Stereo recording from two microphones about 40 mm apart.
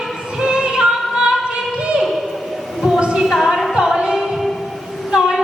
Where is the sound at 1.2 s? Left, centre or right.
Right.